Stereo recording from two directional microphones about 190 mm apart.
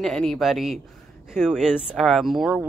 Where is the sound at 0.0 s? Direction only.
5° left (ahead or behind).